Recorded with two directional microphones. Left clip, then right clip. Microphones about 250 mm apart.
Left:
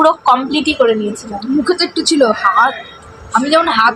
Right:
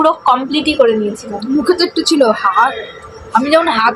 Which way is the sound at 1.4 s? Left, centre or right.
Centre.